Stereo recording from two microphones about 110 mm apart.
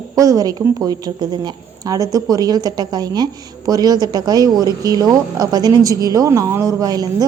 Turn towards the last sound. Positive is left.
turn(degrees=-35)  # may be behind; listen again after turning